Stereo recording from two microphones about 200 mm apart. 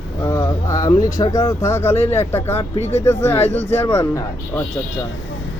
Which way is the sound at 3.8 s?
15° left (ahead or behind).